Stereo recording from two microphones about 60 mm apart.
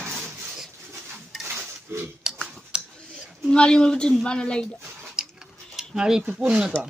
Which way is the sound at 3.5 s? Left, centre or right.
Centre.